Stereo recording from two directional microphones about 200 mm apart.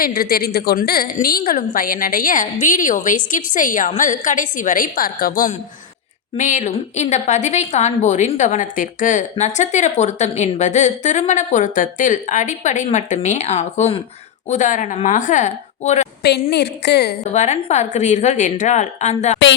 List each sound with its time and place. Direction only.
0.0 s a woman's voice: 50° left (ahead or behind)
16.2 s a woman's voice: 55° left (ahead or behind)
17.3 s a woman's voice: 35° left (ahead or behind)